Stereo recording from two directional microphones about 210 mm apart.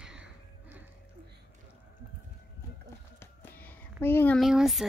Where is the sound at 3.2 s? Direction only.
10° left (ahead or behind).